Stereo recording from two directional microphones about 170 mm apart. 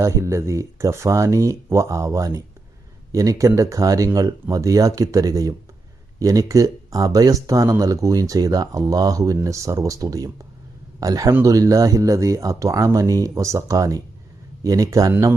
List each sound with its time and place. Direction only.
0.0 s speech: 15° right (ahead or behind)